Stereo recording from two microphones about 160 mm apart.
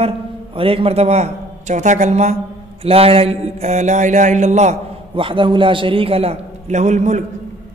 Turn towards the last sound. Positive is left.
turn(degrees=-45)  # may be behind; listen again after turning